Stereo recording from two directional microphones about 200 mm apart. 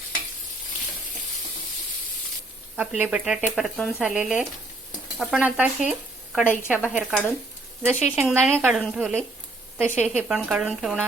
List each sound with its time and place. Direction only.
2.7 s speech: 5° right (ahead or behind)
6.4 s a woman's voice: 10° left (ahead or behind)
6.7 s speech: 5° right (ahead or behind)